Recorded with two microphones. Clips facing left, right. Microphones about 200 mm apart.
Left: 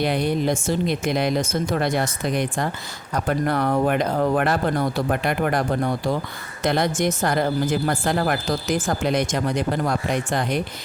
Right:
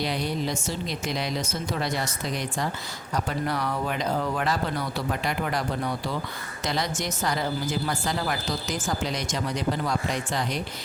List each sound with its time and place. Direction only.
0.0 s a woman's voice: 55° left (ahead or behind)